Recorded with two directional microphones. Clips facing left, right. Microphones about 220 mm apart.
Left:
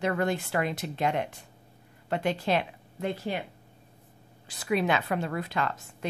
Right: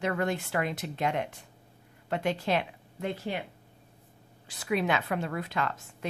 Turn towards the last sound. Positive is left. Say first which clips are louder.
# left 1 dB
turn(degrees=35)  # may be behind; listen again after turning